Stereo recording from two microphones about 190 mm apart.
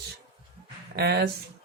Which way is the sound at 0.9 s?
60° right (ahead or behind).